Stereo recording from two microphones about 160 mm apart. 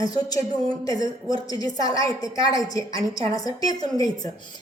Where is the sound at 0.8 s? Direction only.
25° left (ahead or behind).